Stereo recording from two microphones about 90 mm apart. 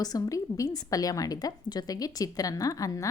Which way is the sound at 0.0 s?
45° left (ahead or behind).